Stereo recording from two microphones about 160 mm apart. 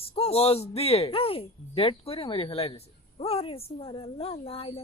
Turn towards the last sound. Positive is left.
turn(degrees=35)  # may be behind; listen again after turning